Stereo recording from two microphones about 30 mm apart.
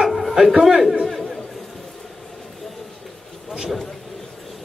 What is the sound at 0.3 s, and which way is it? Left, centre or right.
Speech, centre.